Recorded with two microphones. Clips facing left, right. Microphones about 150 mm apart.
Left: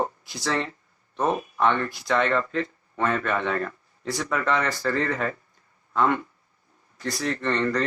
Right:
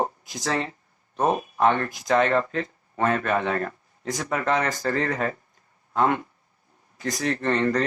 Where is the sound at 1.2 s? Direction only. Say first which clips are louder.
Right 2 dB; 35° right (ahead or behind).